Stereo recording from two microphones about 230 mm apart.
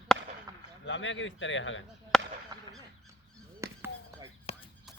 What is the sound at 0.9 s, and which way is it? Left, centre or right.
Speech, left.